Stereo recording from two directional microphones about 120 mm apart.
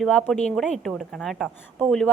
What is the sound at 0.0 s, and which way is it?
A woman's voice, 5° left (ahead or behind).